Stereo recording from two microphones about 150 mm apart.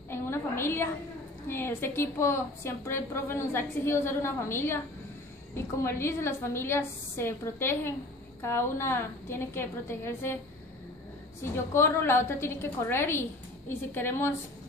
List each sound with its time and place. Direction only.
0.1 s a sound: 15° left (ahead or behind)
1.5 s a woman's voice: 15° left (ahead or behind)
11.4 s a woman's voice: 15° left (ahead or behind)